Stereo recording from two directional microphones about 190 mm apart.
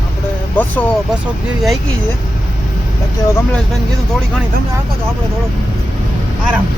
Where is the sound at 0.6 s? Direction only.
10° left (ahead or behind).